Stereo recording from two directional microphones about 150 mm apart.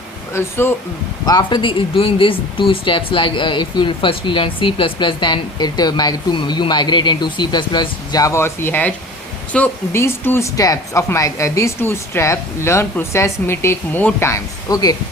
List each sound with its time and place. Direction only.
0.3 s speech: 15° left (ahead or behind)
1.2 s speech: 25° left (ahead or behind)